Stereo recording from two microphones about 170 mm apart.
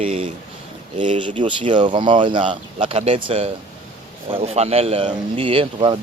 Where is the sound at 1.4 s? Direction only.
30° right (ahead or behind).